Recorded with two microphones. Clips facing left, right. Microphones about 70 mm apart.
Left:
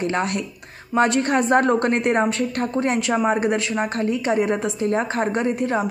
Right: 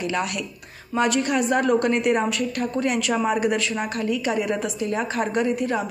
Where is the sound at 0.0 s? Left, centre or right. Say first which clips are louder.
Left 3 dB; left.